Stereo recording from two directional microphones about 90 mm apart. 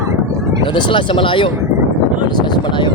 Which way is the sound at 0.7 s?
65° left (ahead or behind).